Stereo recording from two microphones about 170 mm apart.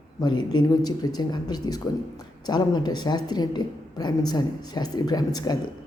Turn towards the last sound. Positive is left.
turn(degrees=25)  # may be behind; listen again after turning